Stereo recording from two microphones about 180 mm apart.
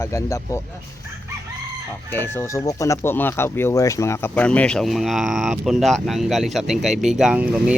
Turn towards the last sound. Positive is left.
turn(degrees=-5)  # may be behind; listen again after turning